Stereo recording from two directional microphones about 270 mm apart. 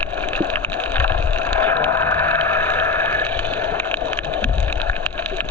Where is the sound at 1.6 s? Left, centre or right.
Centre.